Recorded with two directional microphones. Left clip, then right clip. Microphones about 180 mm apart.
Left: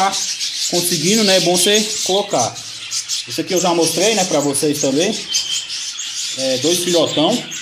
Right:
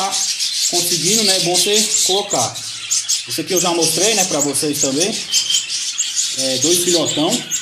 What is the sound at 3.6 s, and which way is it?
Speech, 15° left (ahead or behind).